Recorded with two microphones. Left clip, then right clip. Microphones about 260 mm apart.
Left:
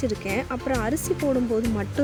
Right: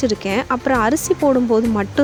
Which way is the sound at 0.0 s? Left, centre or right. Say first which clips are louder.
Right 7 dB; right.